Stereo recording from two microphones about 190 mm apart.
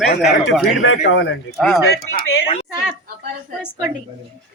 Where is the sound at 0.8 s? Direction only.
80° left.